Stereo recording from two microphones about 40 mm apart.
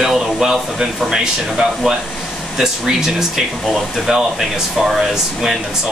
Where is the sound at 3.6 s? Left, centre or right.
Centre.